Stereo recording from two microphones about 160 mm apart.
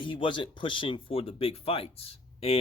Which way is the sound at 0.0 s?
30° left (ahead or behind).